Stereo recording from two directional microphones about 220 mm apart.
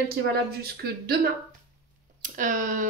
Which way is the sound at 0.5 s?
45° right (ahead or behind).